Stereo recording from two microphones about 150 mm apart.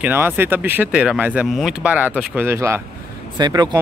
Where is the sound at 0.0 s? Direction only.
15° right (ahead or behind).